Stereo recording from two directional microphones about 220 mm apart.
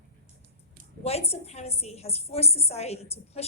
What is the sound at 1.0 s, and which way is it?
A woman's voice, 25° left (ahead or behind).